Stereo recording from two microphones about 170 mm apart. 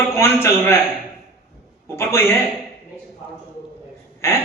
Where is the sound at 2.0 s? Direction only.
15° left (ahead or behind).